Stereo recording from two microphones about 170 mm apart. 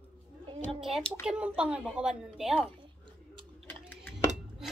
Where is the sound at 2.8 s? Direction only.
30° right (ahead or behind).